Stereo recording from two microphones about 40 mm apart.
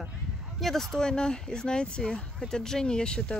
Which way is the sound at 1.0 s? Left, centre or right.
Centre.